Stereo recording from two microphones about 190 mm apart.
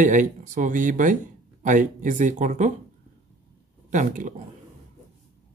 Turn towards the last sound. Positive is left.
turn(degrees=-45)  # may be behind; listen again after turning